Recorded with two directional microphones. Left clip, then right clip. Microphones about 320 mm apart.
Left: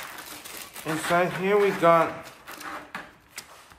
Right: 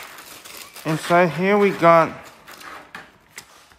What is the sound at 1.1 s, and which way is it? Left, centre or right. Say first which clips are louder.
Speech: right 6 dB; right.